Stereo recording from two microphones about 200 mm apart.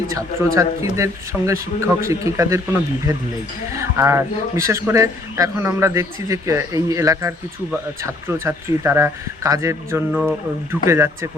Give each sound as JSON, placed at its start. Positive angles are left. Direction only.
{"t": 0.1, "sound": "speech", "side_deg": -15}
{"t": 3.7, "sound": "speech", "side_deg": -15}
{"t": 10.1, "sound": "speech", "side_deg": 0}
{"t": 10.8, "sound": "speech", "side_deg": -15}